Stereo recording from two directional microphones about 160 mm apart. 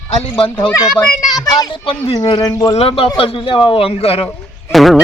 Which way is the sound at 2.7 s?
35° left (ahead or behind).